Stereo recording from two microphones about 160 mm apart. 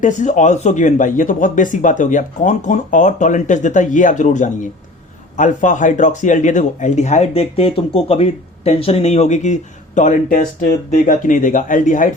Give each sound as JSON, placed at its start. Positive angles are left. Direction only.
{"t": 0.0, "sound": "speech", "side_deg": 50}